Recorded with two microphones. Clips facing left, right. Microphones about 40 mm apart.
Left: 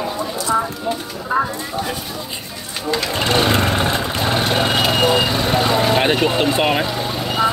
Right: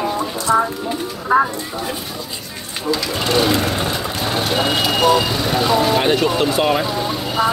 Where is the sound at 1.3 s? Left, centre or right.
Centre.